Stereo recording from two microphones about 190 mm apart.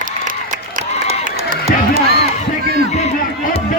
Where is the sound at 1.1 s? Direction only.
35° right (ahead or behind).